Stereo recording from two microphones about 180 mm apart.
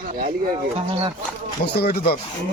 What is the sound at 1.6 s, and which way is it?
Speech, 65° left (ahead or behind).